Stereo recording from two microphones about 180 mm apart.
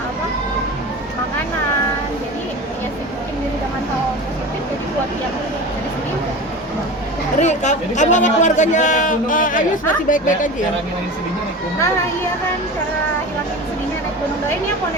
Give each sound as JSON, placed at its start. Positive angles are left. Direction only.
{"t": 7.3, "sound": "a man's voice", "side_deg": 40}